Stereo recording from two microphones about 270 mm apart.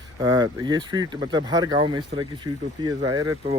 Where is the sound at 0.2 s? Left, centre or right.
Centre.